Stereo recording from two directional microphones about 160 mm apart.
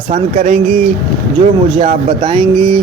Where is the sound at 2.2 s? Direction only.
35° right (ahead or behind).